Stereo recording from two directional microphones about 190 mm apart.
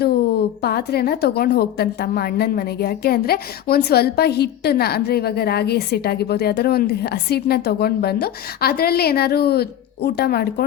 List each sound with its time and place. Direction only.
0.6 s a woman's voice: 55° left (ahead or behind)